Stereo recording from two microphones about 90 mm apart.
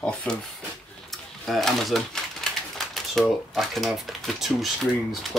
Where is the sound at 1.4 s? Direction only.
Centre (ahead or behind).